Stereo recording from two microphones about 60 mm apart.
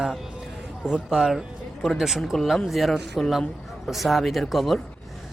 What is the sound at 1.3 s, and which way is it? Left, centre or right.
Speech, centre.